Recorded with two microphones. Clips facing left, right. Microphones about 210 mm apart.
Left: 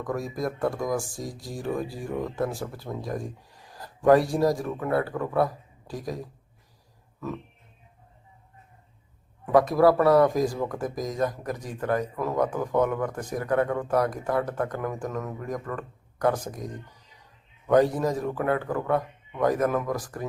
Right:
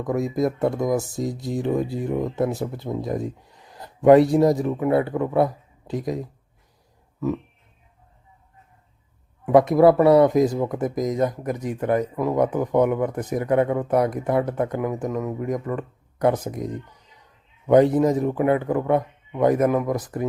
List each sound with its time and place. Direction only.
0.0 s speech: 20° right (ahead or behind)
9.5 s speech: 20° right (ahead or behind)